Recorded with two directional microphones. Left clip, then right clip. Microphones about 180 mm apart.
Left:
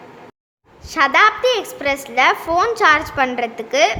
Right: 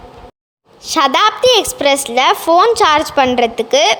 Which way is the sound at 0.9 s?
30° right (ahead or behind).